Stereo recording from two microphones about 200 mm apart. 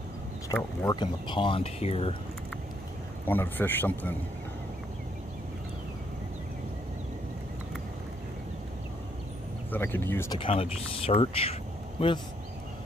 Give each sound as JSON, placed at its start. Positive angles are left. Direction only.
{"t": 0.5, "sound": "speech", "side_deg": 20}
{"t": 3.3, "sound": "a man's voice", "side_deg": 10}
{"t": 9.7, "sound": "a man's voice", "side_deg": 10}
{"t": 10.4, "sound": "speech", "side_deg": 30}